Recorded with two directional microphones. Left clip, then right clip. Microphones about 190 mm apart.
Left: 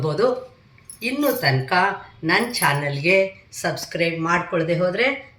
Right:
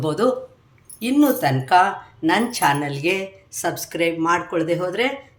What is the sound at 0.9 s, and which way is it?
Speech, 75° right (ahead or behind).